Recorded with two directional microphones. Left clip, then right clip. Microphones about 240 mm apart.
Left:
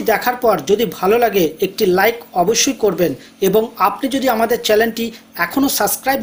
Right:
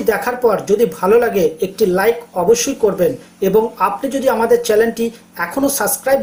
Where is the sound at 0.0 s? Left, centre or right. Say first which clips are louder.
Even; left.